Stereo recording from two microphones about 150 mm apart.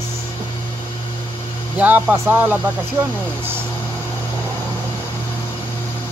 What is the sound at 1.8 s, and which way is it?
Speech, 10° right (ahead or behind).